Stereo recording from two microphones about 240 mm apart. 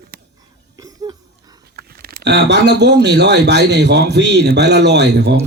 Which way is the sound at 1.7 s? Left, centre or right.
Right.